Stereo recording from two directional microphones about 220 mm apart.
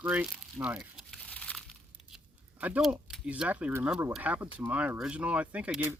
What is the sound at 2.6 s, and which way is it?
Speech, 5° right (ahead or behind).